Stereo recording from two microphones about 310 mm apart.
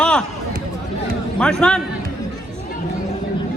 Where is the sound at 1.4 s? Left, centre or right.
Centre.